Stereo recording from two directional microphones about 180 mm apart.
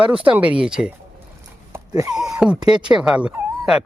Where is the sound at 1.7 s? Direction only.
20° right (ahead or behind).